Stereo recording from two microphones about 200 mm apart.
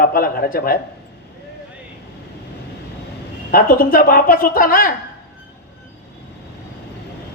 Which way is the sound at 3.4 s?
45° left (ahead or behind).